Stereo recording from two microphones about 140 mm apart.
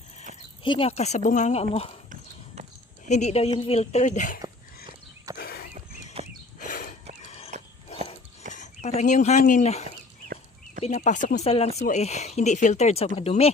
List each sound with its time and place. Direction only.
0.6 s speech: 40° left (ahead or behind)
3.1 s speech: 55° left (ahead or behind)
5.4 s horse: 90° left
6.6 s a sound: 75° left (ahead or behind)
7.3 s a sound: 45° left (ahead or behind)
8.5 s speech: 55° left (ahead or behind)
10.8 s speech: 60° left (ahead or behind)
11.4 s speech: 45° left (ahead or behind)